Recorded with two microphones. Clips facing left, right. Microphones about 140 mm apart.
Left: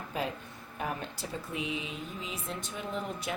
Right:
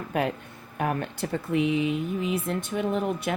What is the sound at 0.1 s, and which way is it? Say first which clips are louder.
Speech: right 8 dB; 65° right (ahead or behind).